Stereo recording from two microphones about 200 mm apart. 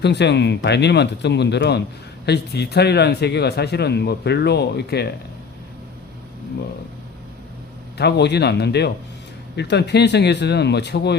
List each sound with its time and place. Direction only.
0.0 s speech: 60° left (ahead or behind)
7.9 s speech: 55° left (ahead or behind)